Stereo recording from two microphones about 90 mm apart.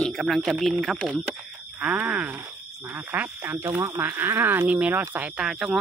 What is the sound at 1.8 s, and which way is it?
Speech, 15° right (ahead or behind).